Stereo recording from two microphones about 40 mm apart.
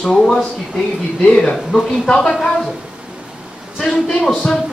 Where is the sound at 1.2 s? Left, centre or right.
Left.